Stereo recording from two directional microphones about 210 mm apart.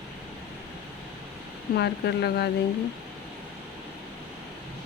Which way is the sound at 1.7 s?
55° left (ahead or behind).